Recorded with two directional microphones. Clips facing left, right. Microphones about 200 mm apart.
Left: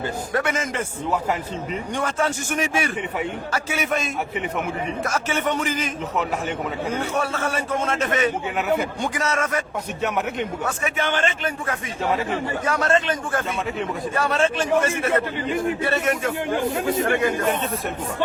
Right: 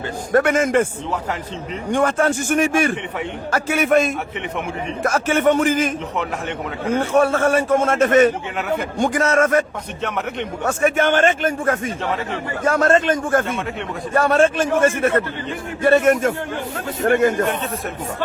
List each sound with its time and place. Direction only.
0.3 s a man's voice: 50° right (ahead or behind)
1.9 s a man's voice: 55° right (ahead or behind)
7.1 s a man's voice: 50° right (ahead or behind)
10.7 s a man's voice: 45° right (ahead or behind)